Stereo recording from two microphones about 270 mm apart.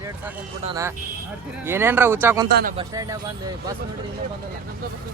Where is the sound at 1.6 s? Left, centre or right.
Centre.